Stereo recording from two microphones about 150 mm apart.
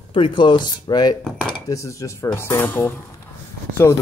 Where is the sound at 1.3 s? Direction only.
5° left (ahead or behind).